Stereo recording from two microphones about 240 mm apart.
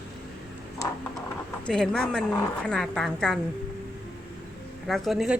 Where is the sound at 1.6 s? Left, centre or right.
Centre.